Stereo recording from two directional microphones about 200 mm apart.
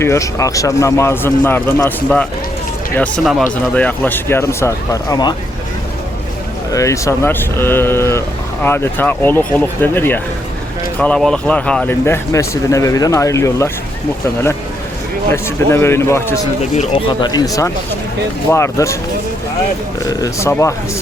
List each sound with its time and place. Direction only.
0.0 s speech: 15° left (ahead or behind)
6.7 s speech: 15° left (ahead or behind)
15.3 s speech: 10° left (ahead or behind)
16.7 s speech: 25° left (ahead or behind)
20.1 s speech: 15° left (ahead or behind)